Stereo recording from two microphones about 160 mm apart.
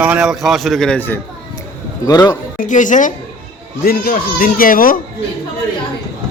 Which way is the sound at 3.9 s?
65° left (ahead or behind).